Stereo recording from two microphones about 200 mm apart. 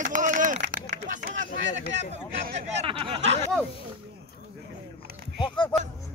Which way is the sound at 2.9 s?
25° right (ahead or behind).